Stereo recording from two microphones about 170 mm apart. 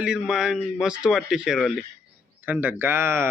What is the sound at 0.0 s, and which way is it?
Speech, 5° right (ahead or behind).